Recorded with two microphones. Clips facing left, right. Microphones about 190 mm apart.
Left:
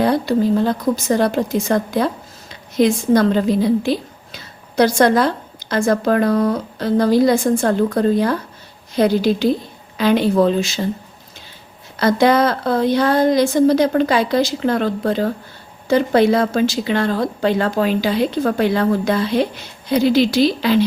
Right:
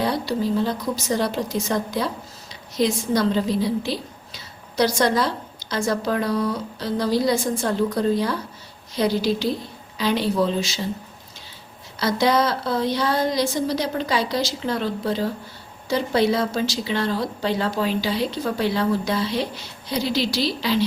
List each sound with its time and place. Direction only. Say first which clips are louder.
0.0 s a woman's voice: left 7 dB; 55° left (ahead or behind)
11.9 s a woman's voice: left 6 dB; 55° left (ahead or behind)